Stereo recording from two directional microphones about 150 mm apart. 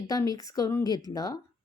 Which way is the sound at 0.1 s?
25° left (ahead or behind).